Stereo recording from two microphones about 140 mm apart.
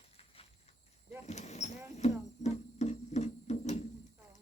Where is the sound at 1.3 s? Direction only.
55° left (ahead or behind).